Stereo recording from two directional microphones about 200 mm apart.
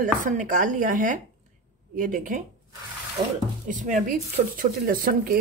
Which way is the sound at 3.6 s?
40° right (ahead or behind).